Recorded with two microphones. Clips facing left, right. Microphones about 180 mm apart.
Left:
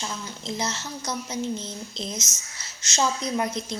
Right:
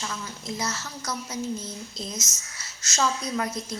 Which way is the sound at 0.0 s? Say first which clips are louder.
Left 1 dB; 25° left (ahead or behind).